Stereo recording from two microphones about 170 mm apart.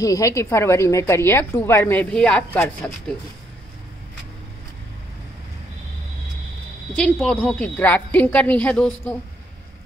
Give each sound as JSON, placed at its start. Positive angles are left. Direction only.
{"t": 0.0, "sound": "a woman's voice", "side_deg": 20}
{"t": 7.0, "sound": "a woman's voice", "side_deg": 5}